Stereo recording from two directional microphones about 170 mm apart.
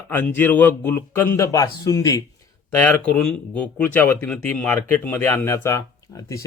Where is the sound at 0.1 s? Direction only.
10° left (ahead or behind).